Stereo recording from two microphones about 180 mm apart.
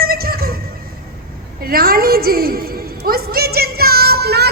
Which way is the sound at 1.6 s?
55° right (ahead or behind).